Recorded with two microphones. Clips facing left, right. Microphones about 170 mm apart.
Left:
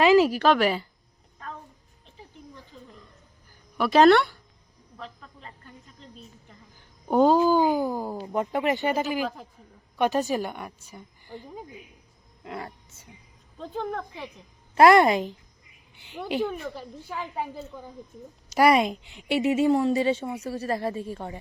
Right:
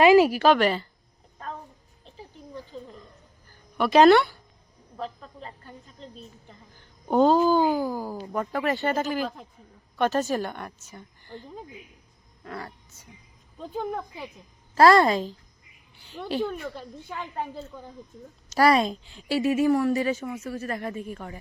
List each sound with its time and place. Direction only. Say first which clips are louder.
0.0 s a woman's voice: right 2 dB; 10° right (ahead or behind)
0.6 s speech: right 1 dB; 10° left (ahead or behind)
2.7 s a woman's voice: right 9 dB; 35° right (ahead or behind)
3.8 s speech: right 1 dB; centre (ahead or behind)
4.9 s a woman's voice: right 7 dB; 35° right (ahead or behind)
7.1 s speech: even; 10° left (ahead or behind)
9.0 s speech: even; 5° left (ahead or behind)
12.4 s speech: left 1 dB; 20° left (ahead or behind)
13.6 s a woman's voice: even; 5° right (ahead or behind)
14.8 s a woman's voice: left 1 dB; 20° left (ahead or behind)
18.5 s a woman's voice: left 1 dB; 20° left (ahead or behind)